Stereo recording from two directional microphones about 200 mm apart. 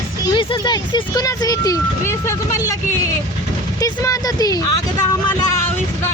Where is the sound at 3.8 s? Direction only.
15° left (ahead or behind).